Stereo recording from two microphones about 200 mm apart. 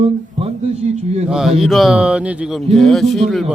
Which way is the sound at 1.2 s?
5° right (ahead or behind).